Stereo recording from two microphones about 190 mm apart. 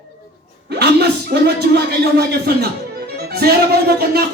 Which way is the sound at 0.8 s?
60° right (ahead or behind).